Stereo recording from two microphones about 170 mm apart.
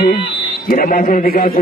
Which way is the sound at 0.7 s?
50° left (ahead or behind).